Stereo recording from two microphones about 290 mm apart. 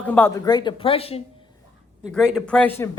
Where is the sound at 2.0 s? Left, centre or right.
Centre.